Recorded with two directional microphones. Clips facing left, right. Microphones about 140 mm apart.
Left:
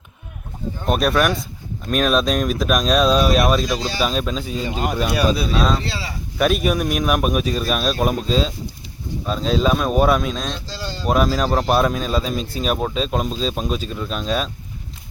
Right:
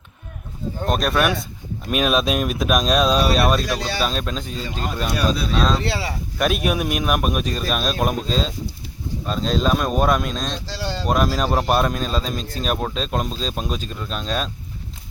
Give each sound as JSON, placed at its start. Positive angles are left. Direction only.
{"t": 0.9, "sound": "speech", "side_deg": 5}
{"t": 5.8, "sound": "speech", "side_deg": -60}
{"t": 6.4, "sound": "speech", "side_deg": 0}
{"t": 10.7, "sound": "speech", "side_deg": -70}
{"t": 11.1, "sound": "speech", "side_deg": 0}